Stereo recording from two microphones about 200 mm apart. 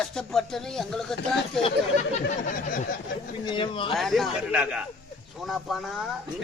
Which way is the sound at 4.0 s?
Centre (ahead or behind).